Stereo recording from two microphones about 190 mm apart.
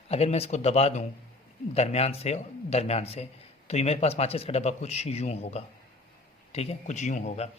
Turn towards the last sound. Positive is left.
turn(degrees=40)  # may be behind; listen again after turning